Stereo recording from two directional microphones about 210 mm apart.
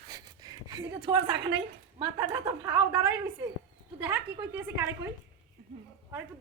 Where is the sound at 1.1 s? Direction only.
20° right (ahead or behind).